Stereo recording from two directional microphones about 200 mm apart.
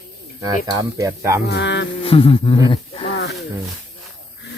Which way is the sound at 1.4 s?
60° left (ahead or behind).